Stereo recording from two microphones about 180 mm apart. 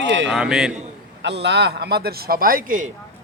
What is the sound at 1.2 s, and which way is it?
Speech, 75° right (ahead or behind).